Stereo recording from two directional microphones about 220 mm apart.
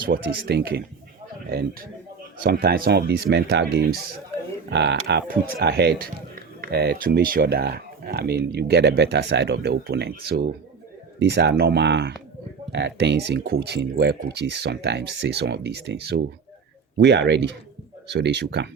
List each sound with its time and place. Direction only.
0.0 s speech: 45° right (ahead or behind)